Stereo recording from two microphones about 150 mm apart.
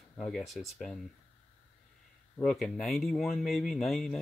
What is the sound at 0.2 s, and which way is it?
Speech, centre (ahead or behind).